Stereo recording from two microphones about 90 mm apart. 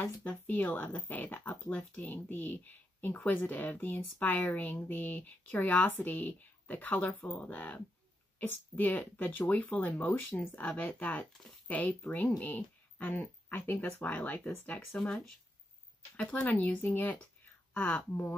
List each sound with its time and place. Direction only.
0.0 s a woman's voice: 15° left (ahead or behind)
14.9 s a woman's voice: 5° left (ahead or behind)